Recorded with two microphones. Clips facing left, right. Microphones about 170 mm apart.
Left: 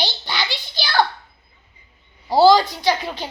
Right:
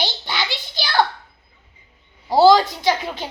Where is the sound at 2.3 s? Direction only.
20° right (ahead or behind).